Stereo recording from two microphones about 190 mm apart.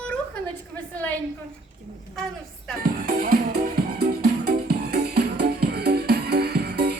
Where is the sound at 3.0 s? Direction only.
50° right (ahead or behind).